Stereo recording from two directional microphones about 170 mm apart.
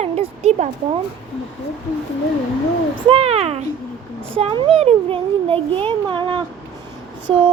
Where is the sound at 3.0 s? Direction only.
35° right (ahead or behind).